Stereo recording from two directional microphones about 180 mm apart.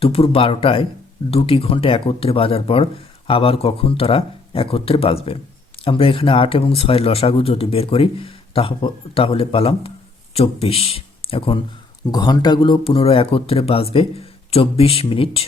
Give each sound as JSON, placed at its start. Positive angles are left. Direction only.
{"t": 0.0, "sound": "speech", "side_deg": 30}